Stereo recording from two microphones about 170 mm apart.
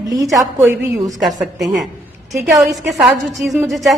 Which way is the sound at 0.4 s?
15° right (ahead or behind).